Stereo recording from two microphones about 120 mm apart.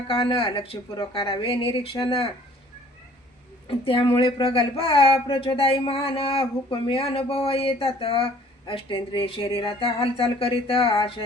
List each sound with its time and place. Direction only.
0.1 s speech: 45° left (ahead or behind)
3.7 s speech: 50° left (ahead or behind)